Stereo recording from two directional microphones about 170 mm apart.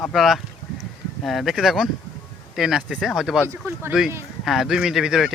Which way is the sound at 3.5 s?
15° right (ahead or behind).